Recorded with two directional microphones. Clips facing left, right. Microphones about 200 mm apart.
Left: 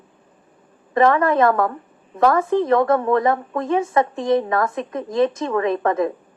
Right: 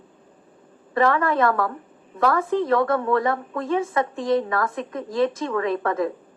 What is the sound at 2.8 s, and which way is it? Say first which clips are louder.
Speech: left 4 dB; 40° left (ahead or behind).